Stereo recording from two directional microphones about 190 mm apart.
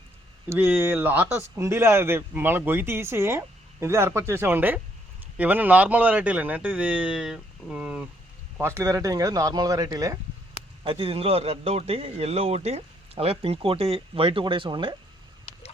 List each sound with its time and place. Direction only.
0.5 s a man's voice: 10° right (ahead or behind)